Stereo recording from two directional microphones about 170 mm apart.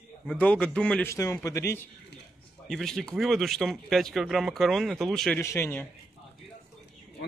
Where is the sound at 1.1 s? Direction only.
20° left (ahead or behind).